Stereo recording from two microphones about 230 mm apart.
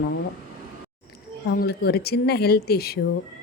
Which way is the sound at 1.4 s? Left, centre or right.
Left.